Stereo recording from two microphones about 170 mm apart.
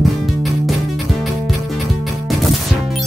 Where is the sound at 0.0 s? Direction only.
Centre (ahead or behind).